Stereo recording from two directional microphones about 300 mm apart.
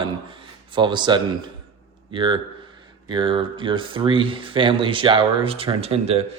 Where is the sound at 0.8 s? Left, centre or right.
Centre.